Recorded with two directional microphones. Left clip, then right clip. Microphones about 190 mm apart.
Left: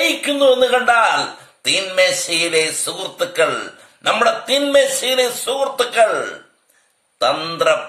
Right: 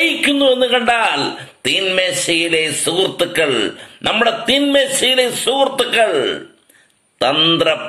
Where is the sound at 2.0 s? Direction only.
15° left (ahead or behind).